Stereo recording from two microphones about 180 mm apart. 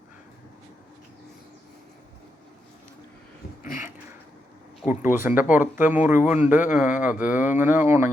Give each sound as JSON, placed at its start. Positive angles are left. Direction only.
{"t": 4.9, "sound": "speech", "side_deg": -15}